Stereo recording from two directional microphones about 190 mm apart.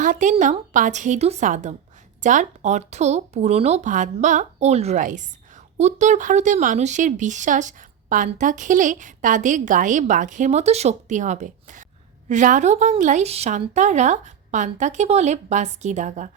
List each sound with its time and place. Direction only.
0.0 s speech: 40° right (ahead or behind)